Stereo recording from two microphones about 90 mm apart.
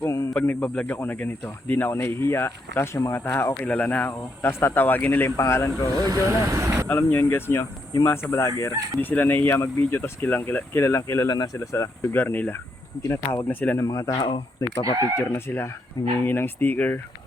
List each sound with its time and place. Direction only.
0.0 s a sound: 35° left (ahead or behind)
0.3 s speech: 15° left (ahead or behind); by 5.9 s 30° left (ahead or behind)
6.1 s speech: 35° right (ahead or behind)
6.8 s speech: 20° left (ahead or behind)
8.7 s speech: 40° right (ahead or behind)
9.0 s speech: 20° left (ahead or behind)
11.3 s speech: 45° left (ahead or behind)
12.1 s speech: 20° left (ahead or behind)
13.8 s speech: 40° left (ahead or behind)
15.2 s speech: 25° left (ahead or behind)